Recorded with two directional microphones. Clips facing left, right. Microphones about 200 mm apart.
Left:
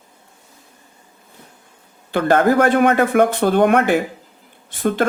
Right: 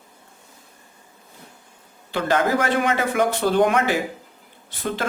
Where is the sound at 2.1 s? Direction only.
55° left (ahead or behind).